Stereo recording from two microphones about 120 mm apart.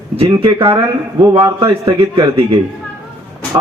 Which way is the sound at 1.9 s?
45° right (ahead or behind).